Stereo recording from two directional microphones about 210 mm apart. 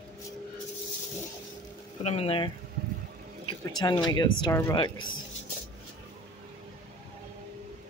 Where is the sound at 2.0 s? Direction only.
30° left (ahead or behind).